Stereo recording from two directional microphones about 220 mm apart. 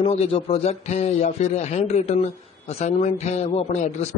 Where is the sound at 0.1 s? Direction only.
30° left (ahead or behind).